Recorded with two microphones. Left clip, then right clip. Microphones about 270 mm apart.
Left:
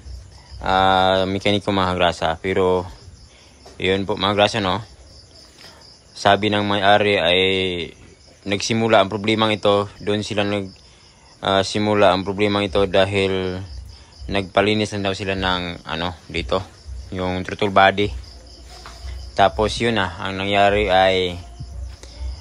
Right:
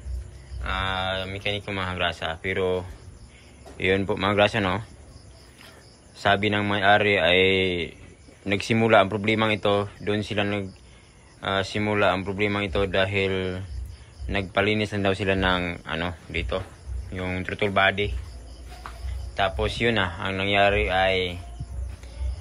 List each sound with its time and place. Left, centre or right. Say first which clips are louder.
0.7 s speech: left 12 dB; centre
6.2 s speech: left 5 dB; centre
19.3 s speech: left 8 dB; centre